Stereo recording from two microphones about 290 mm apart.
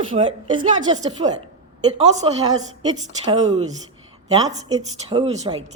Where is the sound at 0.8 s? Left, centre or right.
Centre.